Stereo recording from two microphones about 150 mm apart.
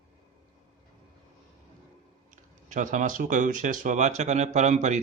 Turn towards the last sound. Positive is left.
turn(degrees=-50)  # may be behind; listen again after turning